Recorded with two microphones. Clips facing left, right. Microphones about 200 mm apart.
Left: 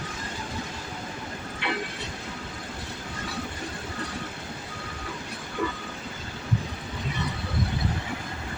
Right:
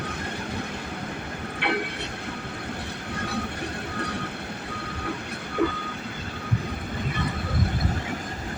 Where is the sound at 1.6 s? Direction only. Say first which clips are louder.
Right 4 dB; 60° right (ahead or behind).